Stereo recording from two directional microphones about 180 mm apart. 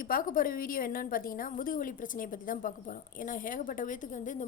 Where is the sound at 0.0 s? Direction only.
50° left (ahead or behind).